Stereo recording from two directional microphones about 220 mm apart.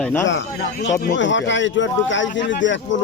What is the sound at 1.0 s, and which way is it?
Speech, 55° left (ahead or behind).